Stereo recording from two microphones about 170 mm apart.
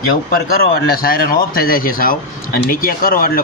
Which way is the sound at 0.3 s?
65° left (ahead or behind).